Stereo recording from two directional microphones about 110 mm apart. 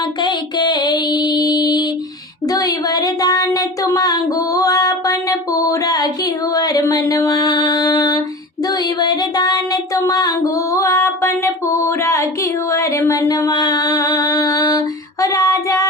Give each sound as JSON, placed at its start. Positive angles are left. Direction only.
{"t": 0.2, "sound": "music", "side_deg": 40}
{"t": 2.5, "sound": "a sound", "side_deg": 35}
{"t": 8.6, "sound": "female singing", "side_deg": 35}